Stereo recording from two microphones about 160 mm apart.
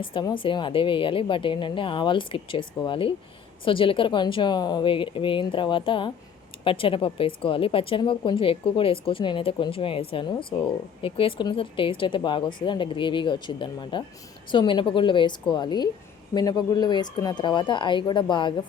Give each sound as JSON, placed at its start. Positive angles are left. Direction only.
{"t": 0.0, "sound": "speech", "side_deg": 30}